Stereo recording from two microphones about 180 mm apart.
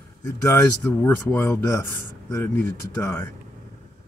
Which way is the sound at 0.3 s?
15° left (ahead or behind).